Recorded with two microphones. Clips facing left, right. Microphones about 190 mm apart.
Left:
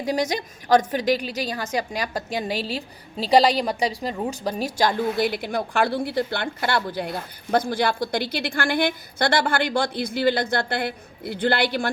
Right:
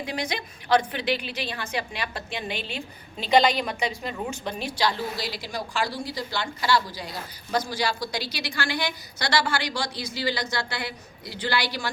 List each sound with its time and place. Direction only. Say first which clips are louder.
0.0 s a woman's voice: left 6 dB; 40° left (ahead or behind)